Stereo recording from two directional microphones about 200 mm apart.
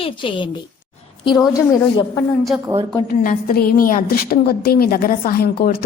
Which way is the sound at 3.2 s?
45° left (ahead or behind).